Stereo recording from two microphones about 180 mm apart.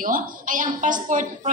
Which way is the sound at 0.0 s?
50° right (ahead or behind).